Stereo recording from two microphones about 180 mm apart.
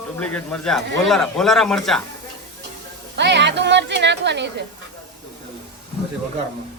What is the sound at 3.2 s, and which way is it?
Speech, 75° right (ahead or behind).